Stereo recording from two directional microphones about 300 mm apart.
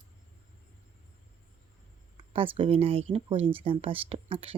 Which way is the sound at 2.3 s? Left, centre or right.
Centre.